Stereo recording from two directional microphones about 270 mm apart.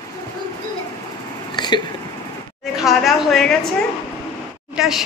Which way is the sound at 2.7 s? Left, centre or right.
Centre.